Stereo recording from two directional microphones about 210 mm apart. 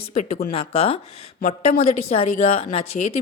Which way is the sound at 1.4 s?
40° left (ahead or behind).